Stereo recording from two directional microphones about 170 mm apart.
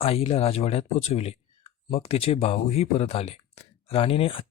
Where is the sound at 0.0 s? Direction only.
35° left (ahead or behind).